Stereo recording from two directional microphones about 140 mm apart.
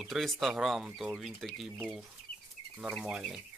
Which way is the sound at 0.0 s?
Centre (ahead or behind).